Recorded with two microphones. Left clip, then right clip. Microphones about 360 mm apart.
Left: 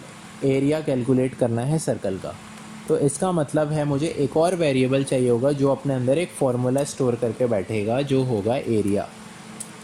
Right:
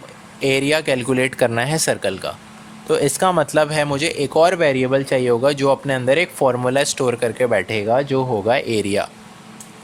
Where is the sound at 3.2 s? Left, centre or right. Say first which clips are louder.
Right 7 dB; right.